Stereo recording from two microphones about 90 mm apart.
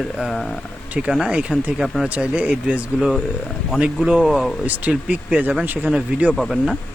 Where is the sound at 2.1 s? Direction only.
15° right (ahead or behind).